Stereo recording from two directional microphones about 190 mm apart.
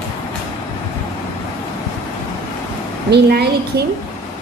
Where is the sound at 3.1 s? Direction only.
55° right (ahead or behind).